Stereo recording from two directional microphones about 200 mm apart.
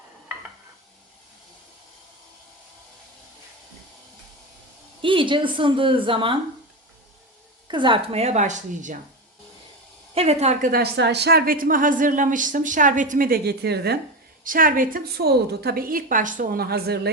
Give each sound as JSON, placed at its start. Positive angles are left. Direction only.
{"t": 5.0, "sound": "a woman's voice", "side_deg": -25}
{"t": 7.7, "sound": "a woman's voice", "side_deg": -25}
{"t": 10.2, "sound": "a woman's voice", "side_deg": -30}
{"t": 10.7, "sound": "a woman's voice", "side_deg": -50}